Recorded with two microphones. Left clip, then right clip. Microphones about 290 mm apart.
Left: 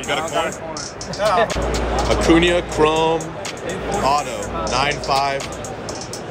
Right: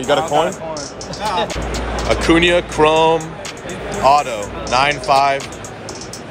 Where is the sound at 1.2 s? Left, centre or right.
Centre.